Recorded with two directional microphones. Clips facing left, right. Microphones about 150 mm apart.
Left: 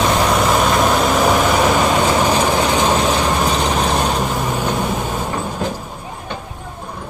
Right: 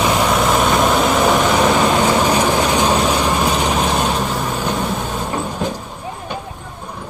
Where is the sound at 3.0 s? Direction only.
10° right (ahead or behind); by 5.3 s 5° left (ahead or behind).